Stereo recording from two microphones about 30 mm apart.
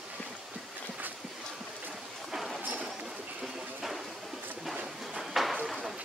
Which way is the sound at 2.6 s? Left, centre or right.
Right.